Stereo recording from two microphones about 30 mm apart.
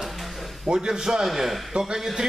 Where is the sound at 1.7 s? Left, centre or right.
Right.